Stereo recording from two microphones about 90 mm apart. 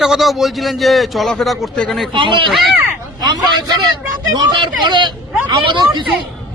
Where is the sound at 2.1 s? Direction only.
70° right (ahead or behind).